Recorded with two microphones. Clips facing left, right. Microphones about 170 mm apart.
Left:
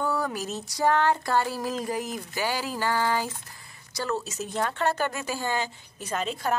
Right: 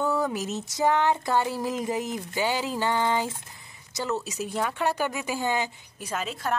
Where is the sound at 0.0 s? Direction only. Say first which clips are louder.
Right 2 dB; 20° right (ahead or behind).